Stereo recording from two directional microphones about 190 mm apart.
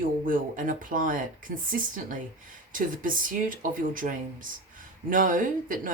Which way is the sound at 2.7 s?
45° right (ahead or behind).